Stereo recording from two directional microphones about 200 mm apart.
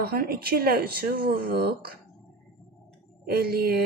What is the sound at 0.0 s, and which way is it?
Speech, 50° right (ahead or behind).